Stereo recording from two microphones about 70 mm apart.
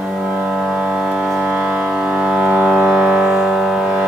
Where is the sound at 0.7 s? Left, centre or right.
Centre.